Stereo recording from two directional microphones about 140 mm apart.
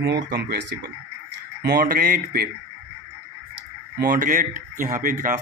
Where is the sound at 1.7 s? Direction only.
90° right.